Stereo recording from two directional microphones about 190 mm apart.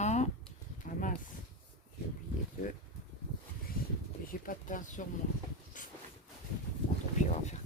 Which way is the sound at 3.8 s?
50° left (ahead or behind).